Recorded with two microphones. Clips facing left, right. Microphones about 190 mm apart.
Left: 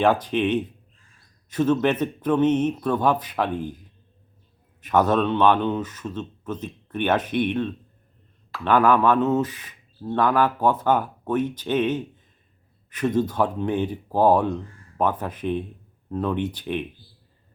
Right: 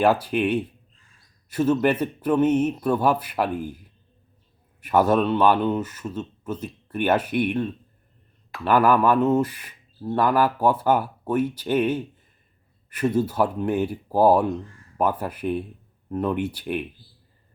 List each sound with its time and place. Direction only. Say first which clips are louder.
0.0 s speech: even; 10° right (ahead or behind)